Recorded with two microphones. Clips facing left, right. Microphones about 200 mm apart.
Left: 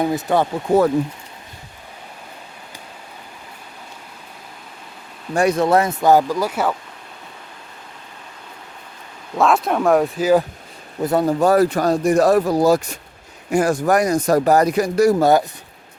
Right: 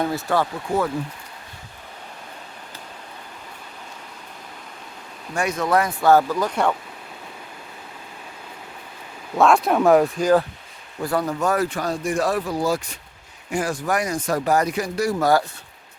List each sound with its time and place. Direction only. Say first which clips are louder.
0.0 s speech: left 4 dB; 20° left (ahead or behind)
0.7 s speech: left 8 dB; 40° left (ahead or behind)
5.3 s speech: left 6 dB; 35° left (ahead or behind); by 6.7 s 5° left (ahead or behind)
9.3 s speech: even; centre (ahead or behind)
11.0 s speech: left 6 dB; 25° left (ahead or behind); by 15.1 s 40° left (ahead or behind)
15.2 s speech: left 4 dB; 20° left (ahead or behind)